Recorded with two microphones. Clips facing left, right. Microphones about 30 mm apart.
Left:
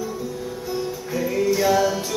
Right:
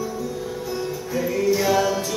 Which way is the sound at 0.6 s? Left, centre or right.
Centre.